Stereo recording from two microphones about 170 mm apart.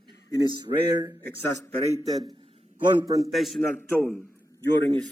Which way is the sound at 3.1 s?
20° right (ahead or behind).